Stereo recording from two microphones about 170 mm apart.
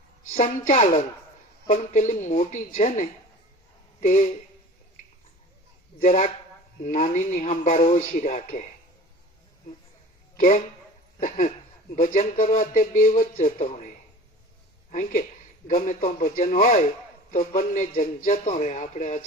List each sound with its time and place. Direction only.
0.3 s speech: 50° left (ahead or behind)
6.0 s speech: 45° left (ahead or behind)
10.3 s speech: 50° left (ahead or behind)
15.6 s speech: 50° left (ahead or behind)